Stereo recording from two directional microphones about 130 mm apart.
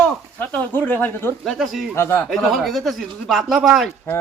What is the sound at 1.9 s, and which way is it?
Speech, 15° left (ahead or behind).